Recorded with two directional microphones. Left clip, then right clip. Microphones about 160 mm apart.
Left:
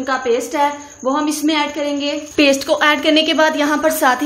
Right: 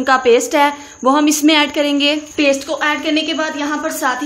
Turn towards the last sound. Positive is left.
turn(degrees=25)  # may be behind; listen again after turning